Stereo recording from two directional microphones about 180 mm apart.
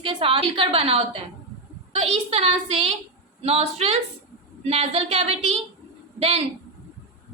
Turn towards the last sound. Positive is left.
turn(degrees=-35)  # may be behind; listen again after turning